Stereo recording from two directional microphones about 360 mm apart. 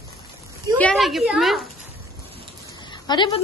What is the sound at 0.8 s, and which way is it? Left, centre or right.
Speech, centre.